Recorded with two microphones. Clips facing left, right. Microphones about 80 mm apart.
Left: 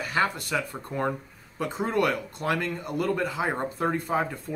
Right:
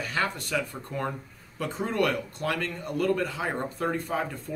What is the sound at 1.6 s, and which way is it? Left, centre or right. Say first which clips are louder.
Speech: left 2 dB; centre.